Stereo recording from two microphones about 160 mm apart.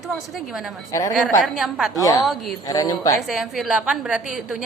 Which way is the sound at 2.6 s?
25° left (ahead or behind).